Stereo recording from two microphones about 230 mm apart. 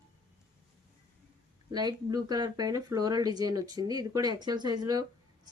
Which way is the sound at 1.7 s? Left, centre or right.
Centre.